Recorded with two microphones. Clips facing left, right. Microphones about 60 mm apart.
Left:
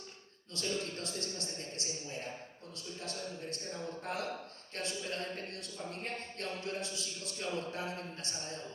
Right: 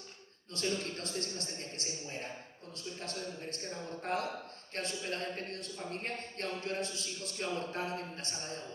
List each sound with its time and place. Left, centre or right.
0.5 s speech: right